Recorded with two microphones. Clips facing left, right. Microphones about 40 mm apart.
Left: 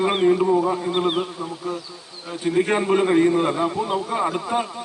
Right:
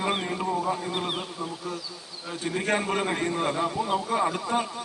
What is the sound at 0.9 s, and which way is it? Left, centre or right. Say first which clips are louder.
Bee: left 8 dB; left.